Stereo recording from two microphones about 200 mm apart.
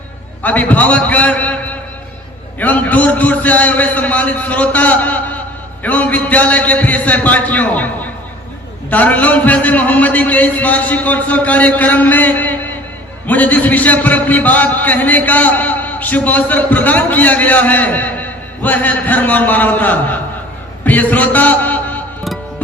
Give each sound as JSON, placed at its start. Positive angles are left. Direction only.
{"t": 0.4, "sound": "a man's voice", "side_deg": 10}
{"t": 20.8, "sound": "music", "side_deg": 10}